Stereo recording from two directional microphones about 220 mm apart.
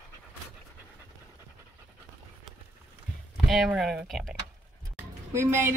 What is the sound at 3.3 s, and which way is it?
Speech, centre (ahead or behind).